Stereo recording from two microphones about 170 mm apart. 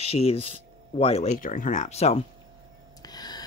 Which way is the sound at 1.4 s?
50° left (ahead or behind).